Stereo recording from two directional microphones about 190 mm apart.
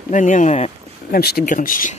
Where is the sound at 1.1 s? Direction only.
55° left (ahead or behind).